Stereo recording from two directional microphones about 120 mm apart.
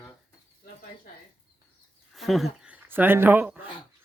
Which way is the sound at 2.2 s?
Centre (ahead or behind).